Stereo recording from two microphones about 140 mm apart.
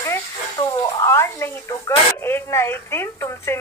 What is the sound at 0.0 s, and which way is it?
A woman's voice, 20° left (ahead or behind).